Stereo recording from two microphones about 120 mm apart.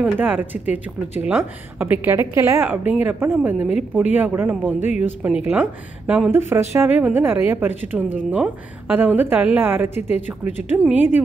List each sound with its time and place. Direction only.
0.0 s speech: 15° right (ahead or behind)
2.1 s a woman's voice: 25° right (ahead or behind)
6.5 s a woman's voice: 20° right (ahead or behind)